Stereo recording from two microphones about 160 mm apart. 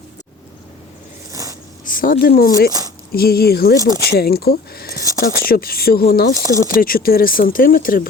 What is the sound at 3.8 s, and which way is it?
Speech, 25° right (ahead or behind).